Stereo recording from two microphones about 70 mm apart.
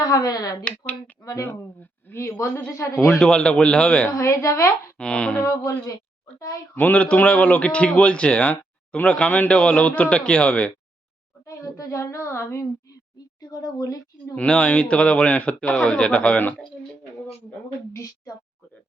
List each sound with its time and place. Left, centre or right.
0.0 s speech: left
0.6 s a man's voice: centre
1.2 s a woman's voice: left
1.5 s a woman's voice: left
3.0 s speech: centre
4.1 s a woman's voice: left
4.9 s speech: centre
6.7 s a man's voice: left
11.4 s a woman's voice: left
12.9 s a sound: left
14.3 s speech: centre